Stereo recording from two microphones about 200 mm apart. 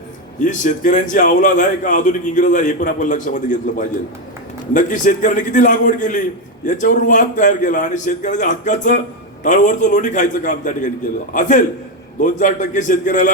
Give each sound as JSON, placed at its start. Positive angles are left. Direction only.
{"t": 0.3, "sound": "a man's voice", "side_deg": 40}